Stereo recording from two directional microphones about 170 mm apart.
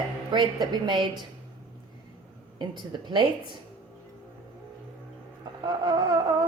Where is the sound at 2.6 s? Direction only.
25° right (ahead or behind).